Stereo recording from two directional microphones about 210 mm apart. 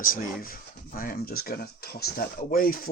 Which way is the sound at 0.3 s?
45° left (ahead or behind).